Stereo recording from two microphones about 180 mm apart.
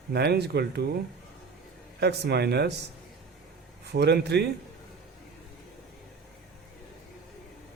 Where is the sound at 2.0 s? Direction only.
65° right (ahead or behind).